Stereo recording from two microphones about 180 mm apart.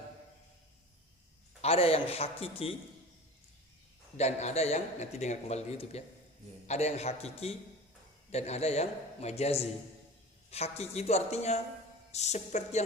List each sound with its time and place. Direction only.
1.6 s a man's voice: 35° left (ahead or behind)
4.2 s a man's voice: 40° left (ahead or behind)